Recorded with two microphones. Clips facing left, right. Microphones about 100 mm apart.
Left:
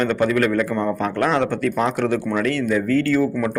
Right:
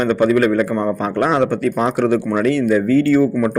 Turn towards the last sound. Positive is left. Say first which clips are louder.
# right 5 dB
turn(degrees=-15)  # may be behind; listen again after turning